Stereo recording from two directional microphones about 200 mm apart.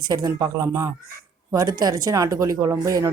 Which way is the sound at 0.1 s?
20° right (ahead or behind).